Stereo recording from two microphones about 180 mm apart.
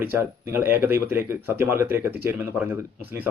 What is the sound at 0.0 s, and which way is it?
Speech, 10° right (ahead or behind).